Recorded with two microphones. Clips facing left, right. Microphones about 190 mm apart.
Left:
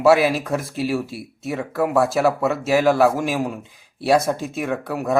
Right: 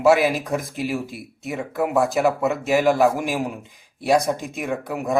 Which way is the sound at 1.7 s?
20° right (ahead or behind).